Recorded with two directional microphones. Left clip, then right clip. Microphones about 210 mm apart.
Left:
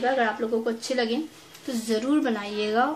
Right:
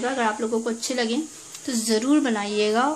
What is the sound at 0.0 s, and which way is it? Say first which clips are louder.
A woman's voice: even; 30° right (ahead or behind).